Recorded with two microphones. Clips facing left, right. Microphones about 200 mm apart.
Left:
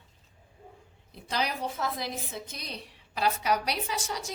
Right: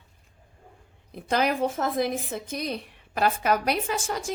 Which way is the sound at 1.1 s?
55° right (ahead or behind).